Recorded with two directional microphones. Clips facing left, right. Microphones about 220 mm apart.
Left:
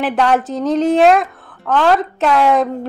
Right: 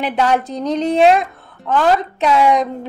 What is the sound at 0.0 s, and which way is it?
Speech, centre (ahead or behind).